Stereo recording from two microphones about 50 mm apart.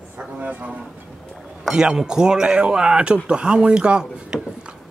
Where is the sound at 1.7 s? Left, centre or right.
Centre.